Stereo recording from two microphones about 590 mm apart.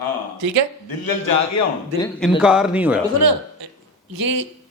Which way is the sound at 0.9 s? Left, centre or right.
Left.